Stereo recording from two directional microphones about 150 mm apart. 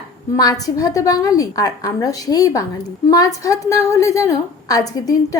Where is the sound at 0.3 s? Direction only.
25° left (ahead or behind).